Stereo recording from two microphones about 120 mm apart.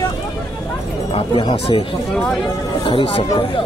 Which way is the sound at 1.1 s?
45° left (ahead or behind).